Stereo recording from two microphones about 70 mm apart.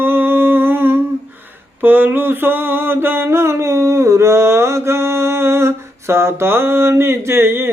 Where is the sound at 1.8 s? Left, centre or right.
Right.